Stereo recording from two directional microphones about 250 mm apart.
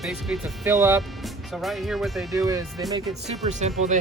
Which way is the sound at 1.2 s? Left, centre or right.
Centre.